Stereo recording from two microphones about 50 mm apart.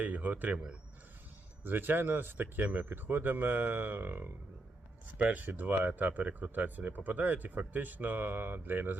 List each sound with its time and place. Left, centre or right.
0.0 s speech: right
1.6 s speech: right
2.6 s speech: right
2.9 s speech: right
5.1 s speech: right